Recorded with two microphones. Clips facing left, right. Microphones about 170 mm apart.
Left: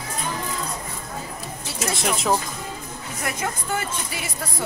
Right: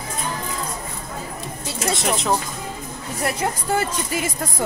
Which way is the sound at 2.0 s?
Centre (ahead or behind).